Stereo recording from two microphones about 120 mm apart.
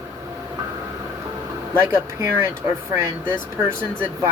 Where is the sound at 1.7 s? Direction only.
20° right (ahead or behind).